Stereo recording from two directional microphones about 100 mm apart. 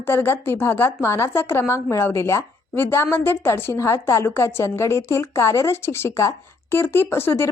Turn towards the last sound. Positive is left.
turn(degrees=25)  # may be behind; listen again after turning